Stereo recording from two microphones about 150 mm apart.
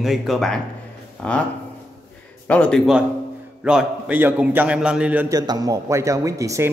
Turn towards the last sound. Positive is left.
turn(degrees=-20)  # may be behind; listen again after turning